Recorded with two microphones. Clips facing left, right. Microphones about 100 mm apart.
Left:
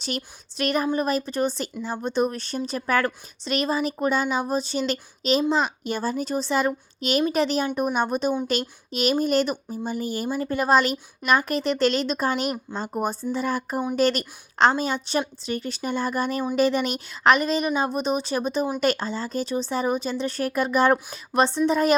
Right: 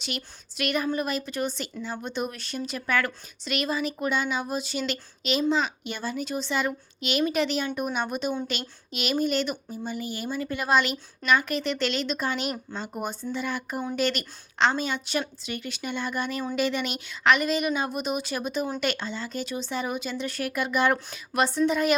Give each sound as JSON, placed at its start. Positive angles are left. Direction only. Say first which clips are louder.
{"t": 0.5, "sound": "speech", "louder": "left 3 dB", "side_deg": 35}